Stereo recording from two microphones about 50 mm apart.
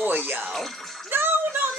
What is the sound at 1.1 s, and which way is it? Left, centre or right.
Music, right.